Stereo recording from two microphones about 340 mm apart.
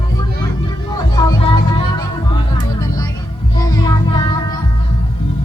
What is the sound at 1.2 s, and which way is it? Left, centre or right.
Music, centre.